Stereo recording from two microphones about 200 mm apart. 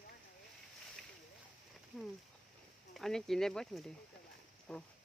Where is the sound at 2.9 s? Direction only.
Centre (ahead or behind).